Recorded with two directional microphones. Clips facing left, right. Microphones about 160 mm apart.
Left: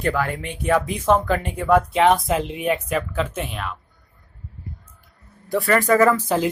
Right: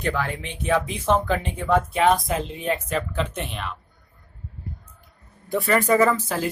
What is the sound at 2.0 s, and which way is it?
Speech, 20° left (ahead or behind).